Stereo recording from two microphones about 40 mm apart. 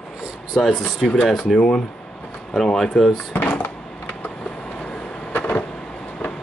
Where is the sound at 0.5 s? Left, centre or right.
Left.